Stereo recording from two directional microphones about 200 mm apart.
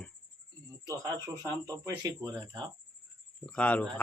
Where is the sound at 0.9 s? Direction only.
15° right (ahead or behind).